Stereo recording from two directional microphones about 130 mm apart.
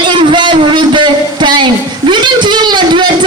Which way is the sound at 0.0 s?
40° right (ahead or behind).